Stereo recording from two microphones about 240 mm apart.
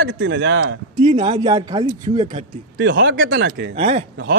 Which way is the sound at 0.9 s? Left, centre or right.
Right.